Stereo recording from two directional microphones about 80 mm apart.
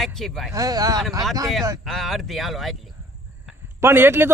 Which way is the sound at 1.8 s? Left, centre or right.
Centre.